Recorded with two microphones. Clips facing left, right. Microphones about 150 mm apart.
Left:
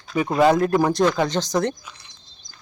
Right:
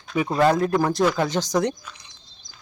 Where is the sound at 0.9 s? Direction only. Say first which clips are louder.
Left 1 dB; 5° right (ahead or behind).